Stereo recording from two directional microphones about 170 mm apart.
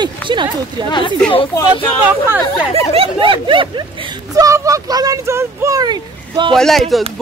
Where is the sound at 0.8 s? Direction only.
25° left (ahead or behind).